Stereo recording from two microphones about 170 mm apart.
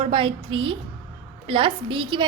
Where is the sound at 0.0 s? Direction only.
30° right (ahead or behind).